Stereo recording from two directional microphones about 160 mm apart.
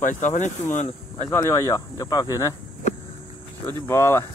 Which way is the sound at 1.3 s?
15° left (ahead or behind).